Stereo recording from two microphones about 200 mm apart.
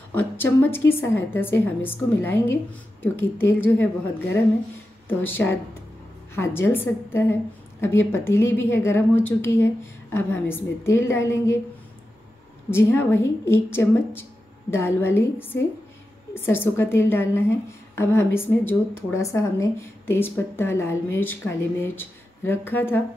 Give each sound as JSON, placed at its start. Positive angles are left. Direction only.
{"t": 0.1, "sound": "a woman's voice", "side_deg": 10}
{"t": 12.6, "sound": "a woman's voice", "side_deg": 10}